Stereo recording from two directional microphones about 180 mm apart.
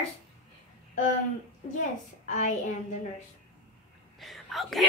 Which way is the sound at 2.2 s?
40° left (ahead or behind).